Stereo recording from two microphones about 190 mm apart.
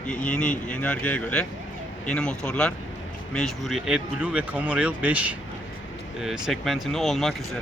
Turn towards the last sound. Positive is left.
turn(degrees=0)  # may be behind; listen again after turning